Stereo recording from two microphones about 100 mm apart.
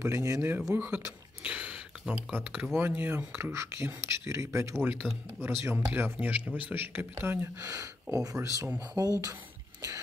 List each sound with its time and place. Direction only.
0.0 s speech: 30° right (ahead or behind)
0.7 s speech: 15° right (ahead or behind); by 9.1 s 35° right (ahead or behind)
9.8 s a sound: 35° right (ahead or behind)